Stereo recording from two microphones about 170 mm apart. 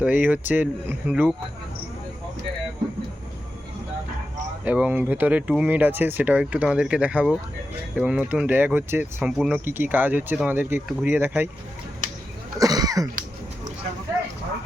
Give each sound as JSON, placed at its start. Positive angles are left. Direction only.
{"t": 0.0, "sound": "speech", "side_deg": -10}
{"t": 4.6, "sound": "speech", "side_deg": -10}
{"t": 12.5, "sound": "speech", "side_deg": -20}